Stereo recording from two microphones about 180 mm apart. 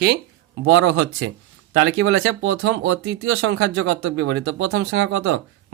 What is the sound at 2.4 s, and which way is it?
Speech, 90° right.